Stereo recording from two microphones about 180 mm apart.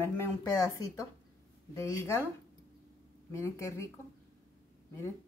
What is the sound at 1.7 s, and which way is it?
Speech, 15° left (ahead or behind).